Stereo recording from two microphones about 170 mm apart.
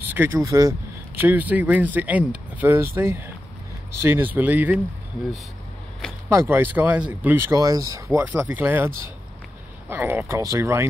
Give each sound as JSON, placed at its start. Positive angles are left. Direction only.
{"t": 0.0, "sound": "speech", "side_deg": -10}
{"t": 6.2, "sound": "speech", "side_deg": -15}
{"t": 7.5, "sound": "speech", "side_deg": -20}
{"t": 8.2, "sound": "speech", "side_deg": -10}